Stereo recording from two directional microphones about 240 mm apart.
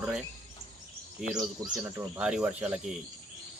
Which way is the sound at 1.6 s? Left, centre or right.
Centre.